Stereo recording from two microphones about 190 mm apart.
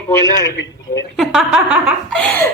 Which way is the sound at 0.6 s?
70° left (ahead or behind).